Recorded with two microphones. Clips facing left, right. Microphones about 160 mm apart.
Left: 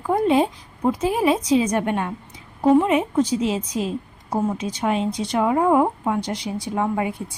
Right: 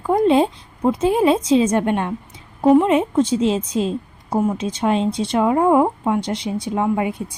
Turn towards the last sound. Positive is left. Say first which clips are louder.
# right 3 dB
turn(degrees=-20)  # may be behind; listen again after turning